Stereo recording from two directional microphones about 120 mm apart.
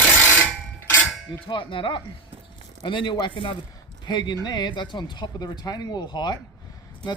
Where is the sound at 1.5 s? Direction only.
45° left (ahead or behind).